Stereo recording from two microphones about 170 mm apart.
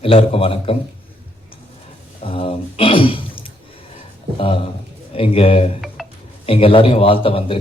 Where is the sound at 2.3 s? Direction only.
35° left (ahead or behind).